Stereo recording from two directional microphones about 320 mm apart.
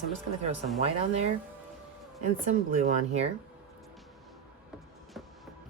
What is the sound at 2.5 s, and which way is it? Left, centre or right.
Speech, right.